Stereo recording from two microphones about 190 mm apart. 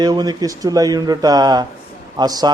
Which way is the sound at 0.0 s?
20° right (ahead or behind).